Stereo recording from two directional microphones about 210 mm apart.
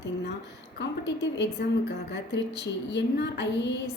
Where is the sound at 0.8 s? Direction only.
55° left (ahead or behind).